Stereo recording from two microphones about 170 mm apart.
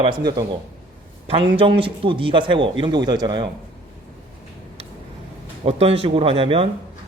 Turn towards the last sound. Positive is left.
turn(degrees=-35)  # may be behind; listen again after turning